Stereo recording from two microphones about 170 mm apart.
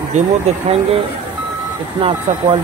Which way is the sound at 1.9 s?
30° right (ahead or behind).